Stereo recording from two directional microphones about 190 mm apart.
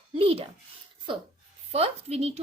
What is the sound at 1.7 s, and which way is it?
Speech, 35° right (ahead or behind).